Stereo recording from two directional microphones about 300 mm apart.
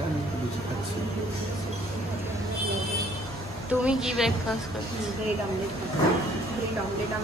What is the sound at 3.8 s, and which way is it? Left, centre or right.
Speech, centre.